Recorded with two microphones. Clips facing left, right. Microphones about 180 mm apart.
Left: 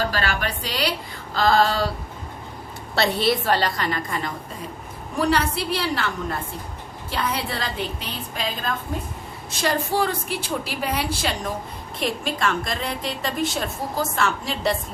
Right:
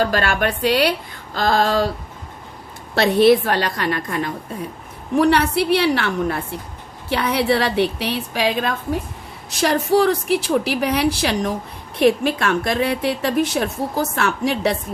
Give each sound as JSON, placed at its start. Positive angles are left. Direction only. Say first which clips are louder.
{"t": 0.0, "sound": "speech", "louder": "right 6 dB", "side_deg": -50}
{"t": 2.9, "sound": "a woman's voice", "louder": "right 8 dB", "side_deg": -55}